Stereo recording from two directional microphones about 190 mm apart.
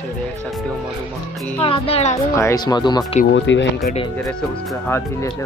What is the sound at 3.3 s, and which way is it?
Speech, 75° left (ahead or behind).